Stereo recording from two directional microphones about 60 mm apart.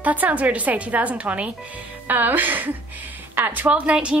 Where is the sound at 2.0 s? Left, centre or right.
Right.